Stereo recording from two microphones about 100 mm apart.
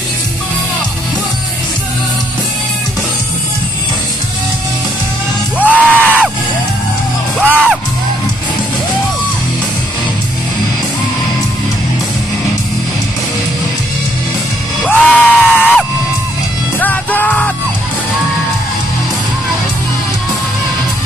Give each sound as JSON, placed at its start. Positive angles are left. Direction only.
{"t": 5.6, "sound": "music", "side_deg": -15}
{"t": 7.4, "sound": "music", "side_deg": -15}
{"t": 14.9, "sound": "screaming", "side_deg": 15}
{"t": 15.3, "sound": "screaming", "side_deg": -5}
{"t": 16.8, "sound": "music", "side_deg": 15}